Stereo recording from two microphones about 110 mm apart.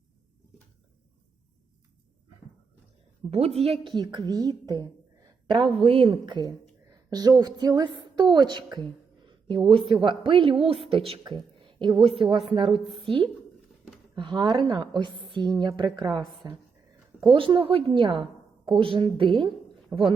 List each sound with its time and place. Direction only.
3.2 s a woman's voice: 70° right (ahead or behind)
3.8 s a woman's voice: 40° right (ahead or behind); by 11.2 s 60° right (ahead or behind)
11.2 s a woman's voice: 45° right (ahead or behind)
14.2 s a woman's voice: 45° right (ahead or behind)